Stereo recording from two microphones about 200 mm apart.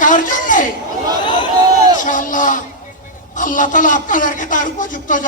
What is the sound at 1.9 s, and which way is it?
A woman's voice, 40° left (ahead or behind).